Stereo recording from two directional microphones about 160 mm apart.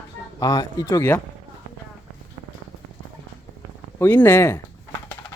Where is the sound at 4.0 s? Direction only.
10° left (ahead or behind).